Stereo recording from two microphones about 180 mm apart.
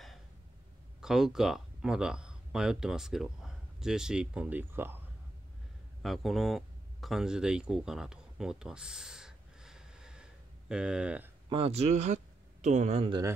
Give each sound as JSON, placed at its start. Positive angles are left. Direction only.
{"t": 1.0, "sound": "speech", "side_deg": 0}
{"t": 6.0, "sound": "speech", "side_deg": 0}
{"t": 11.4, "sound": "speech", "side_deg": -30}